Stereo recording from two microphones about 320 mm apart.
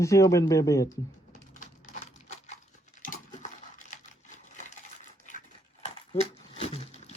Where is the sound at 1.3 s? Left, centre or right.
Left.